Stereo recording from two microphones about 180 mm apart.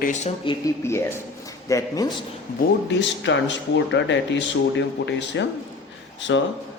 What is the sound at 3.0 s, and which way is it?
A man's voice, 90° left.